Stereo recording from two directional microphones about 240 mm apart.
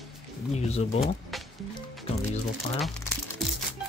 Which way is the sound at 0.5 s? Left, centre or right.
Left.